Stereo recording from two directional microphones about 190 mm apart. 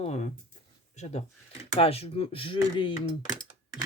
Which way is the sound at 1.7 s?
30° left (ahead or behind).